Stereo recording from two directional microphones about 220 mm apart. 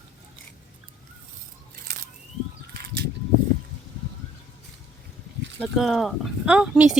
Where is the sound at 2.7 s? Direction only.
45° right (ahead or behind).